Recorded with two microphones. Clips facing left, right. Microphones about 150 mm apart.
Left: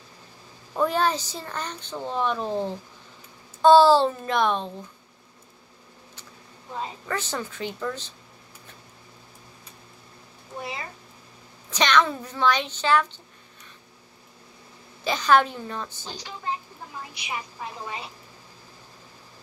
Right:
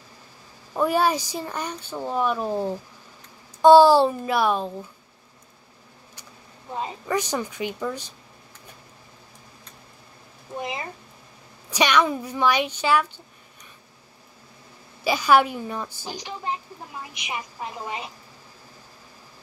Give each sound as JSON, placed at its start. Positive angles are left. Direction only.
{"t": 0.7, "sound": "speech", "side_deg": -10}
{"t": 7.1, "sound": "speech", "side_deg": -15}
{"t": 11.7, "sound": "speech", "side_deg": -10}
{"t": 15.0, "sound": "a woman's voice", "side_deg": -10}